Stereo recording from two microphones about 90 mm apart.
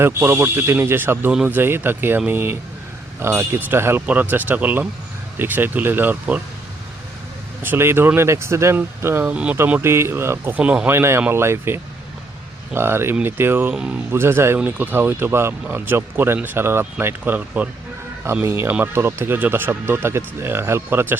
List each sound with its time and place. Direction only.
0.0 s speech: 25° right (ahead or behind)
7.6 s speech: 25° right (ahead or behind)
9.3 s speech: 15° right (ahead or behind)
9.8 s speech: 30° right (ahead or behind)
10.6 s speech: 15° right (ahead or behind)
10.8 s speech: 30° right (ahead or behind)